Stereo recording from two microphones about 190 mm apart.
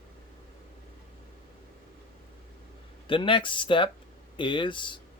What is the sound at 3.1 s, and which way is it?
Speech, 25° left (ahead or behind).